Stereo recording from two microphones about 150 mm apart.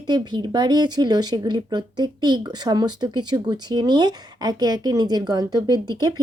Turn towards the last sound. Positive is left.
turn(degrees=-30)  # may be behind; listen again after turning